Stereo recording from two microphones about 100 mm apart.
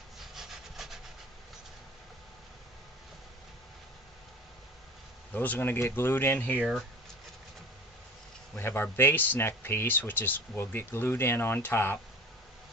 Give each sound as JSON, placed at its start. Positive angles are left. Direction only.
{"t": 0.2, "sound": "rub", "side_deg": -5}
{"t": 5.3, "sound": "speech", "side_deg": 15}
{"t": 6.6, "sound": "speech", "side_deg": -5}
{"t": 8.5, "sound": "speech", "side_deg": 25}